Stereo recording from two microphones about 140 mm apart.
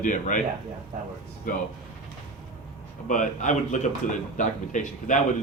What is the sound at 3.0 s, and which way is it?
Speech, 65° left (ahead or behind).